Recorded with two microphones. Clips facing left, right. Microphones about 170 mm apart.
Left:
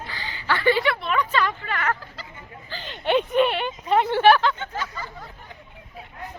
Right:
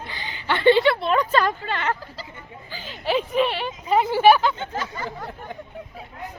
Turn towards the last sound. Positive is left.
turn(degrees=-65)  # may be behind; listen again after turning